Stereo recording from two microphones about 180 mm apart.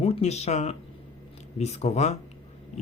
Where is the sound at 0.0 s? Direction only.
35° left (ahead or behind).